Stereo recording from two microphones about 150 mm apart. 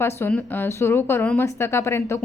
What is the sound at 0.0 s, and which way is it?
A woman's voice, 15° left (ahead or behind).